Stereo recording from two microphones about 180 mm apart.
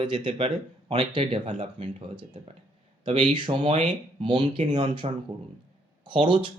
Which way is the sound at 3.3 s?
30° right (ahead or behind).